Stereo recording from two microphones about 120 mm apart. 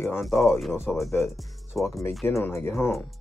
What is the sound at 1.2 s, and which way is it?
Speech, centre (ahead or behind).